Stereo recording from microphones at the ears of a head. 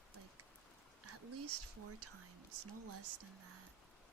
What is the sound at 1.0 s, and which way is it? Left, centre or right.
Speech, right.